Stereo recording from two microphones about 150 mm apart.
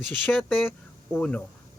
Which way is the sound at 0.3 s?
Centre (ahead or behind).